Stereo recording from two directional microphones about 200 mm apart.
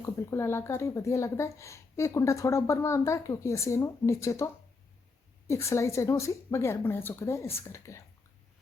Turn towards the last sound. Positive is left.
turn(degrees=15)  # may be behind; listen again after turning